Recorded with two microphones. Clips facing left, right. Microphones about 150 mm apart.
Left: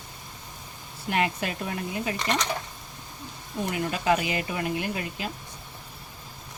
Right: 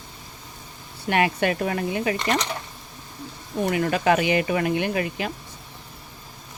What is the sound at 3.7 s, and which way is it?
Speech, 80° right.